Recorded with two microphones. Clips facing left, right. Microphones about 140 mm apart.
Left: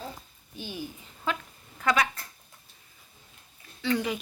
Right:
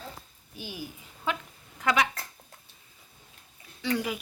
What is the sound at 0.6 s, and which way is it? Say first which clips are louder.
A woman's voice: left 2 dB; 10° right (ahead or behind).